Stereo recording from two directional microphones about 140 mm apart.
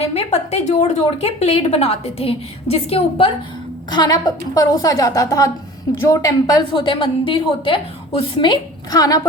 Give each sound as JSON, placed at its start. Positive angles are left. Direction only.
{"t": 0.1, "sound": "a woman's voice", "side_deg": 50}
{"t": 3.8, "sound": "a woman's voice", "side_deg": 30}